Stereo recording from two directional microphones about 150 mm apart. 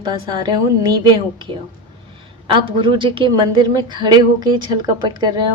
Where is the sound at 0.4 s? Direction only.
30° right (ahead or behind).